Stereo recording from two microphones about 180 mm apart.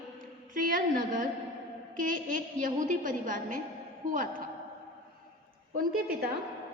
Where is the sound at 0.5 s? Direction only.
50° right (ahead or behind).